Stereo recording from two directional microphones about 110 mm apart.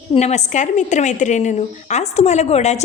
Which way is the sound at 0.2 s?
90° left.